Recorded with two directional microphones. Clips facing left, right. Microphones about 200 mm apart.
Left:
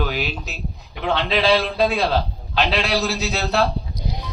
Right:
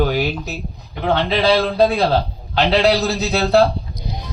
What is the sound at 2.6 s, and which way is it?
A man's voice, 60° right (ahead or behind).